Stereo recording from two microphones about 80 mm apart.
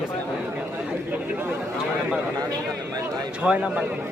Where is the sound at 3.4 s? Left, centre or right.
Centre.